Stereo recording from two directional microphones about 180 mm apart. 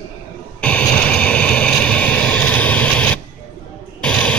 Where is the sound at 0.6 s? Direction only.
5° left (ahead or behind).